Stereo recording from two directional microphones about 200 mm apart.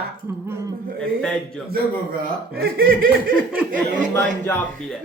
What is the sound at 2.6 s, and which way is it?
Speech, 45° right (ahead or behind).